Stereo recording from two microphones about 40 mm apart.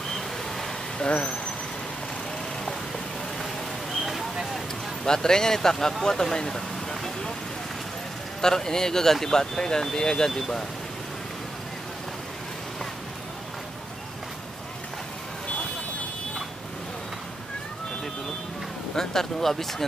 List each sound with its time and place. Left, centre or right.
0.9 s speech: left
3.9 s a sound: centre
5.0 s speech: centre
6.3 s vehicle: centre
8.4 s speech: centre
18.9 s speech: centre